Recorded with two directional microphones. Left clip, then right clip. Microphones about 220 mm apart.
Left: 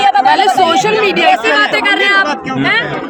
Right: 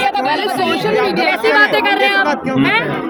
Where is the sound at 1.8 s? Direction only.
Centre (ahead or behind).